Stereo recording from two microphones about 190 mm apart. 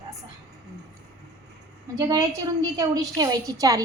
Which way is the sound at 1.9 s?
20° right (ahead or behind).